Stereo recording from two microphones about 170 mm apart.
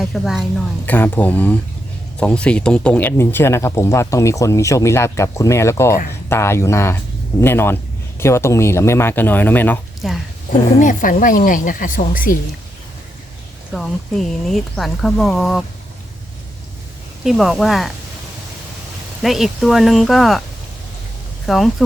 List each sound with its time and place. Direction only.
0.0 s a woman's voice: centre (ahead or behind)
0.9 s speech: 10° left (ahead or behind)
10.0 s speech: centre (ahead or behind)
10.8 s a woman's voice: 50° left (ahead or behind)
13.7 s speech: centre (ahead or behind)
17.2 s speech: centre (ahead or behind)
19.2 s speech: centre (ahead or behind)
21.4 s speech: centre (ahead or behind)